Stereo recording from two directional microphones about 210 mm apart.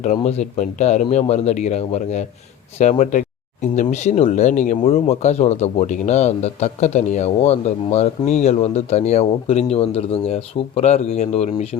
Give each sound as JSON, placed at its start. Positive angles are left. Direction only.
{"t": 0.0, "sound": "speech", "side_deg": 35}